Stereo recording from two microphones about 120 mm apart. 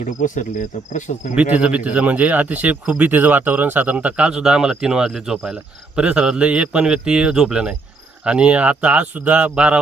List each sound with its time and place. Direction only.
0.0 s speech: 90° left
1.4 s speech: 10° right (ahead or behind)